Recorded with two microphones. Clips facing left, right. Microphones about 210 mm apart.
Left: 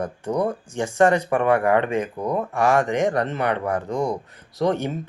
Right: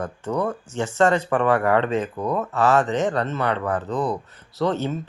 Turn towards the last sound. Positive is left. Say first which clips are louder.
# left 1 dB
turn(degrees=15)  # may be behind; listen again after turning